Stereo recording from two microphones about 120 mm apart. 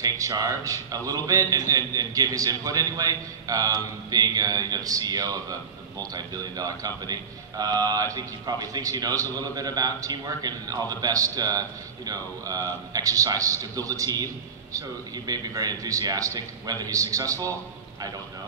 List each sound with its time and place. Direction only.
0.0 s a man's voice: 30° right (ahead or behind)